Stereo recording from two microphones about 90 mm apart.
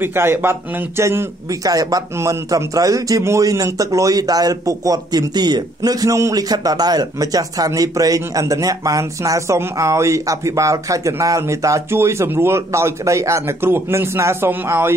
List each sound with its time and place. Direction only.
0.0 s a man's voice: 25° right (ahead or behind)
1.5 s a man's voice: 40° right (ahead or behind)
5.8 s a man's voice: 40° right (ahead or behind); by 15.0 s 25° right (ahead or behind)